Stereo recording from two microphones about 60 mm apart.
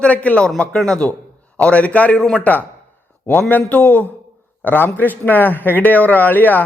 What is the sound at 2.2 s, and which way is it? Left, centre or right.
Speech, centre.